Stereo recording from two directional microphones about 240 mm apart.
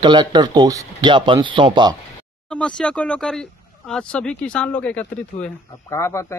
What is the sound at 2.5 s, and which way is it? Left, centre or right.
Speech, centre.